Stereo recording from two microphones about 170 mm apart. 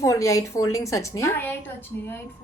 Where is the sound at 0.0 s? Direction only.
20° left (ahead or behind).